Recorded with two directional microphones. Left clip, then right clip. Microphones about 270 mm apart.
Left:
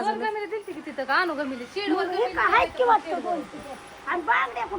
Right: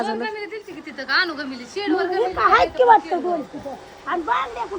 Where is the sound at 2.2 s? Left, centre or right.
Centre; by 3.0 s right.